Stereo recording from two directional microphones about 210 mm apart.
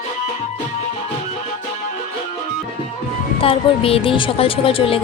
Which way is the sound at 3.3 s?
25° left (ahead or behind).